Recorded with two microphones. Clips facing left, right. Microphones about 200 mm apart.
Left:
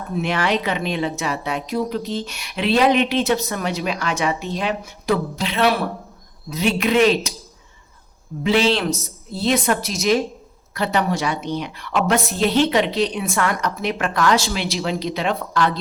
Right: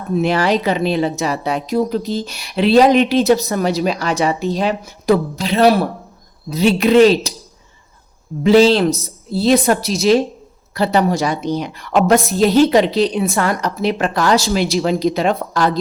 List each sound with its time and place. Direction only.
0.2 s speech: 35° right (ahead or behind)
8.4 s speech: 40° right (ahead or behind)